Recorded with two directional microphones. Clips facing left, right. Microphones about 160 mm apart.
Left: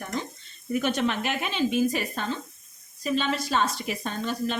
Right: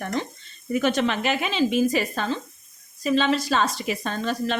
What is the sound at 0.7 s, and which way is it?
Speech, 90° right.